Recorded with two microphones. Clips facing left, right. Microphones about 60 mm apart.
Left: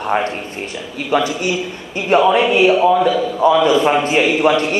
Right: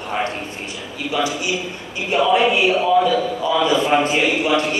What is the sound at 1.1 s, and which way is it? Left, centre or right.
A man's voice, left.